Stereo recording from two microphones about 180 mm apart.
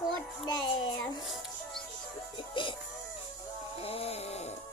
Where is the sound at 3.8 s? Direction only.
30° left (ahead or behind).